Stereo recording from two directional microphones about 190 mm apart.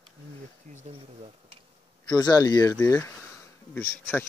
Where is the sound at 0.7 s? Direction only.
35° right (ahead or behind).